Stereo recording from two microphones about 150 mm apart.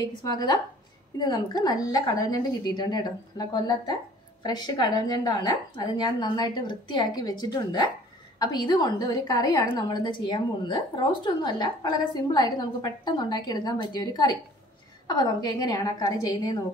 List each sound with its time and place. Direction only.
0.0 s a woman's voice: 25° left (ahead or behind)